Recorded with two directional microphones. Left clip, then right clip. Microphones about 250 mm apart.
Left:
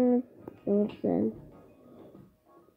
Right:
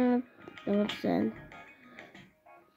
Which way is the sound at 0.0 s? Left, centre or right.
Centre.